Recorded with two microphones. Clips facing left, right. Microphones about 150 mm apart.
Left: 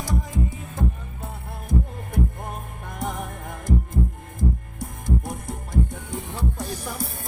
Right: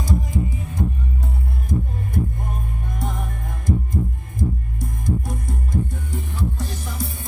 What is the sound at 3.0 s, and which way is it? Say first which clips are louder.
Music: left 1 dB; 15° left (ahead or behind).